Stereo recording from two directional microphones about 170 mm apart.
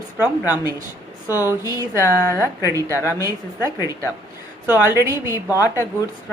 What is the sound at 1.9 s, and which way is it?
Speech, 15° left (ahead or behind).